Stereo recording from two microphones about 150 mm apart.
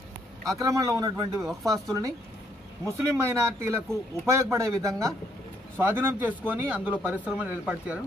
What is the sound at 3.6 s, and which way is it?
Speech, 15° right (ahead or behind).